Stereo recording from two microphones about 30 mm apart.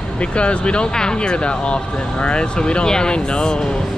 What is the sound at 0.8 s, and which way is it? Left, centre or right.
Speech, left.